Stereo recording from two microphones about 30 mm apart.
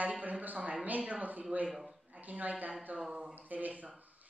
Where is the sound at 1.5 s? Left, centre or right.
Right.